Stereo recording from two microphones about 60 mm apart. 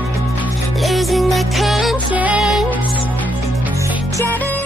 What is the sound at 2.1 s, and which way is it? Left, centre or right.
Music, right.